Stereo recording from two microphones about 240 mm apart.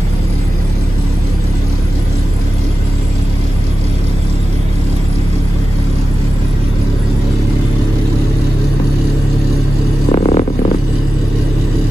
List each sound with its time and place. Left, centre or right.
10.1 s vehicle: left